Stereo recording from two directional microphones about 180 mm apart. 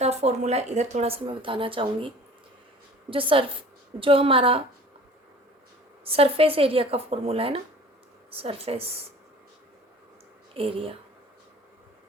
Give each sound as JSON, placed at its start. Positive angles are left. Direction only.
{"t": 0.0, "sound": "speech", "side_deg": -35}
{"t": 3.1, "sound": "a woman's voice", "side_deg": -30}
{"t": 6.1, "sound": "speech", "side_deg": -30}
{"t": 10.5, "sound": "speech", "side_deg": -30}